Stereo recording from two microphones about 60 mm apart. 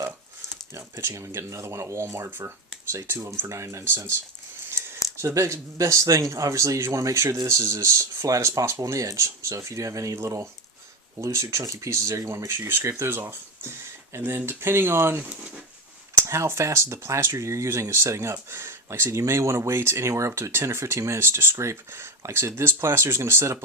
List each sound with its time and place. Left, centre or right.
1.0 s speech: right
5.2 s speech: right
12.5 s speech: right
16.2 s speech: right